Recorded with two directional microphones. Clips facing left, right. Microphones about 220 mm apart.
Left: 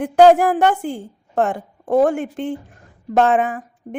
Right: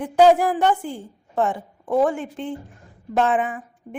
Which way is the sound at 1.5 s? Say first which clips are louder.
Left 4 dB; 45° left (ahead or behind).